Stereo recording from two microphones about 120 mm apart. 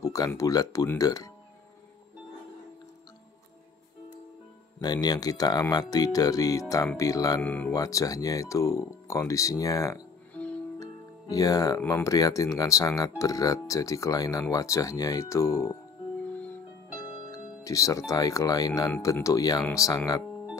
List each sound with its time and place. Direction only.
0.0 s speech: 30° left (ahead or behind)
4.8 s speech: 35° left (ahead or behind)
7.4 s speech: 15° left (ahead or behind)
7.7 s speech: 30° left (ahead or behind)
10.3 s music: 10° left (ahead or behind)
10.8 s music: 30° left (ahead or behind)
11.8 s speech: 25° left (ahead or behind)
17.3 s speech: 25° left (ahead or behind)